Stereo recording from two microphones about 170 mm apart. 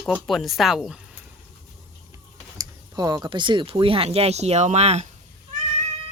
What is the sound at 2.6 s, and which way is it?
Speech, 25° right (ahead or behind).